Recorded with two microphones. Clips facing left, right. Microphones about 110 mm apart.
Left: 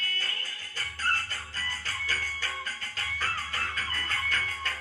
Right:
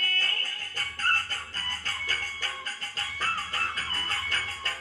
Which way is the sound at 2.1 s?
45° right (ahead or behind).